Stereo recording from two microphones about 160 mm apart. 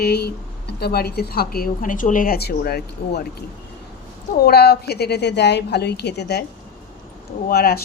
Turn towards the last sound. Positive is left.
turn(degrees=75)  # may be behind; listen again after turning